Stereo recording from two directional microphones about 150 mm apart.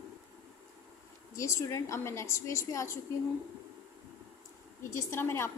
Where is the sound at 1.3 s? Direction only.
20° left (ahead or behind).